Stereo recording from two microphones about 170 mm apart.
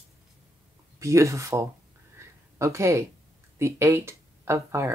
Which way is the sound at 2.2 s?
15° right (ahead or behind).